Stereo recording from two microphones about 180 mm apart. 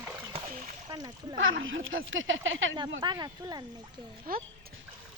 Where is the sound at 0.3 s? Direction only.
40° right (ahead or behind).